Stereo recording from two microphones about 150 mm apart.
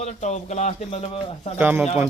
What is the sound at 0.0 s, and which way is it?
Speech, 50° left (ahead or behind).